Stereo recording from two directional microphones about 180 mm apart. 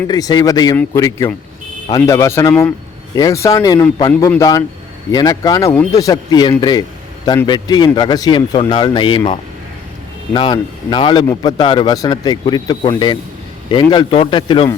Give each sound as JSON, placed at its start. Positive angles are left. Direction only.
{"t": 0.1, "sound": "a man's voice", "side_deg": 20}